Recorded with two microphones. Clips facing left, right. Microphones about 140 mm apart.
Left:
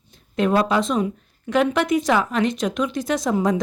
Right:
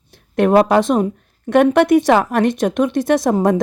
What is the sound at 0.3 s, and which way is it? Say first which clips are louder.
Speech: right 7 dB; 65° right (ahead or behind).